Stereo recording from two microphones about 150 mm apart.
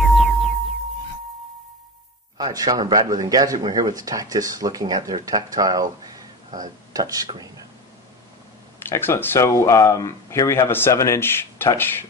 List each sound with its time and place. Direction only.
0.0 s music: centre (ahead or behind)
2.3 s speech: 25° right (ahead or behind)
8.8 s speech: 15° left (ahead or behind)